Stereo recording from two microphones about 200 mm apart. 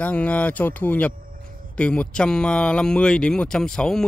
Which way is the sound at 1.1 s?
45° right (ahead or behind).